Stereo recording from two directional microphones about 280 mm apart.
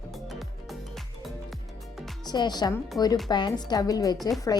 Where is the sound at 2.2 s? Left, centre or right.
Centre.